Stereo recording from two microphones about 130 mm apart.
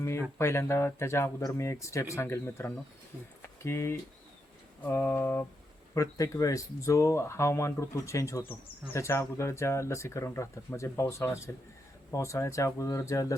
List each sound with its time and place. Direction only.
0.3 s speech: 20° left (ahead or behind)
3.4 s a sound: 20° left (ahead or behind)
5.9 s speech: 25° left (ahead or behind)